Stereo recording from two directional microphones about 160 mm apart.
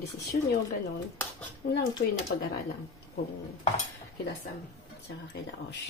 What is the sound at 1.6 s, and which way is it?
Speech, 70° left (ahead or behind).